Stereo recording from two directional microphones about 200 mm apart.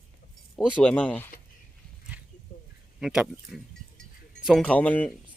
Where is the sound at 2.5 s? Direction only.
35° left (ahead or behind).